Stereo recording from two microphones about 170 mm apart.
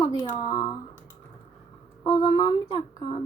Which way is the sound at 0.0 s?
25° left (ahead or behind).